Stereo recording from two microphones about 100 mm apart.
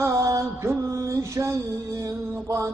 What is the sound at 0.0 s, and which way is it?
Music, 30° right (ahead or behind).